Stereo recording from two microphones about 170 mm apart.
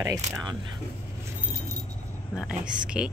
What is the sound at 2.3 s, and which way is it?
Speech, 5° right (ahead or behind).